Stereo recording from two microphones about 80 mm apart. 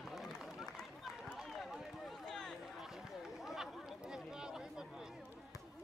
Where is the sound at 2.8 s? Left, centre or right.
Centre.